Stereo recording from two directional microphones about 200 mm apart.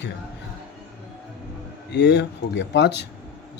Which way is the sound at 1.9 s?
60° left (ahead or behind).